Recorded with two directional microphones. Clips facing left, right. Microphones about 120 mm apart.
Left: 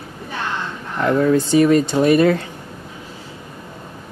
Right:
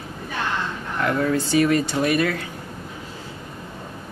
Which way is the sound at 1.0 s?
25° left (ahead or behind).